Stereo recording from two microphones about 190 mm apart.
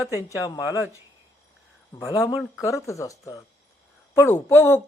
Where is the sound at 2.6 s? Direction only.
15° left (ahead or behind).